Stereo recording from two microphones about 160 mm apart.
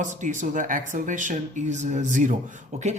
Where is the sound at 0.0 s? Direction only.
50° right (ahead or behind).